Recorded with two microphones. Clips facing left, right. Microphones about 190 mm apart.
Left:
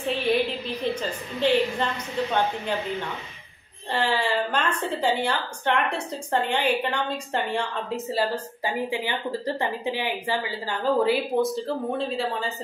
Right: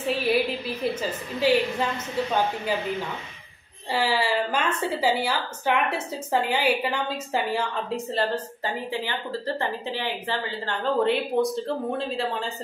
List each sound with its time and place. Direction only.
0.0 s a woman's voice: 5° right (ahead or behind)
8.1 s a woman's voice: 10° left (ahead or behind)
9.6 s a woman's voice: 15° left (ahead or behind)